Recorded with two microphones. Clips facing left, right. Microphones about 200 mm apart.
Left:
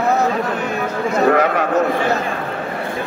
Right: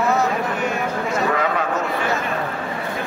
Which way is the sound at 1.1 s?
55° left (ahead or behind).